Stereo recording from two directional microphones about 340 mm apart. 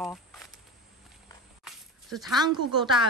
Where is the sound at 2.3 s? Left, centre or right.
Centre.